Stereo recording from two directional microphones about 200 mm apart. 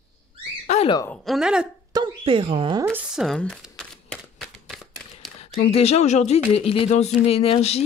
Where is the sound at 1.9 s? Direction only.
20° right (ahead or behind).